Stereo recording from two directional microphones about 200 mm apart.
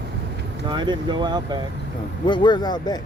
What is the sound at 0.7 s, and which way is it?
Speech, 20° right (ahead or behind).